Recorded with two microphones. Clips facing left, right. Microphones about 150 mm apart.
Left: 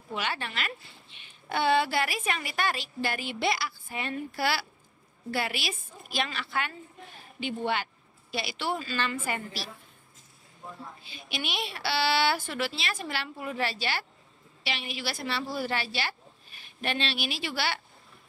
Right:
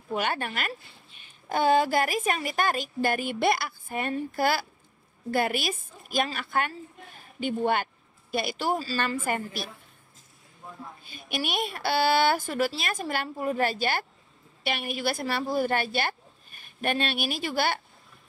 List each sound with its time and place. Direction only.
0.1 s speech: 50° right (ahead or behind)
9.0 s speech: 50° right (ahead or behind)
11.1 s a woman's voice: 50° right (ahead or behind)